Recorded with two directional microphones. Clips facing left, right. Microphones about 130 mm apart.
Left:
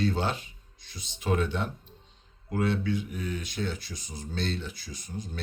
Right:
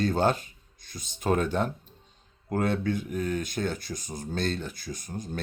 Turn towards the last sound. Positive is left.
turn(degrees=-50)  # may be behind; listen again after turning